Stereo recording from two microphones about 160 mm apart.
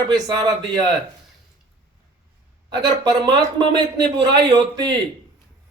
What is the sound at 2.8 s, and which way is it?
A man's voice, 25° right (ahead or behind).